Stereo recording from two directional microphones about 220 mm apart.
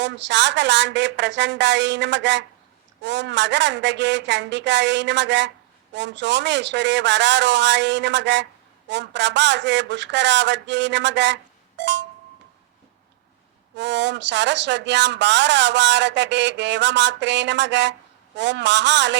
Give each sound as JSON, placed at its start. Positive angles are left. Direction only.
{"t": 0.0, "sound": "speech", "side_deg": -55}
{"t": 13.7, "sound": "speech", "side_deg": -55}